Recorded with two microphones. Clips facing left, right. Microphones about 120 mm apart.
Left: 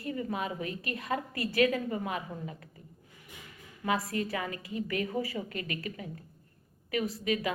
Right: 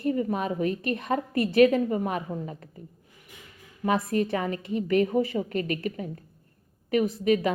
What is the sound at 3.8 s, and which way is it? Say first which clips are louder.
A woman's voice: right 6 dB; 25° right (ahead or behind).